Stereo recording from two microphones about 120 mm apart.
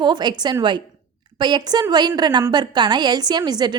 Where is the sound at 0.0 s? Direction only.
35° right (ahead or behind).